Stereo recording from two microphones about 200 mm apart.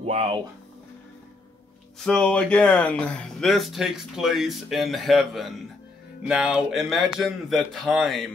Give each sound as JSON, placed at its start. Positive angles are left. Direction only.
{"t": 0.0, "sound": "speech", "side_deg": -30}
{"t": 2.0, "sound": "speech", "side_deg": 5}